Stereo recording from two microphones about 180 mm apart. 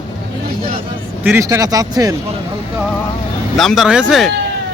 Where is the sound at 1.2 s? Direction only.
15° right (ahead or behind).